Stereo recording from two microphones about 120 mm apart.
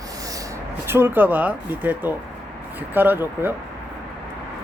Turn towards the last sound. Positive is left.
turn(degrees=-20)  # may be behind; listen again after turning